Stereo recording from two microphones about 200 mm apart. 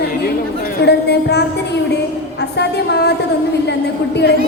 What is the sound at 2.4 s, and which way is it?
A woman's voice, 55° left (ahead or behind).